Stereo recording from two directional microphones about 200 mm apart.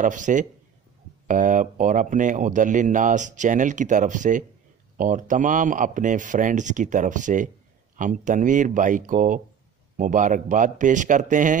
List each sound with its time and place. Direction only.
0.0 s speech: 40° right (ahead or behind)